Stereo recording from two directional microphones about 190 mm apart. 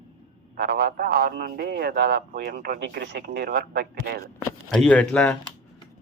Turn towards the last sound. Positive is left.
turn(degrees=5)  # may be behind; listen again after turning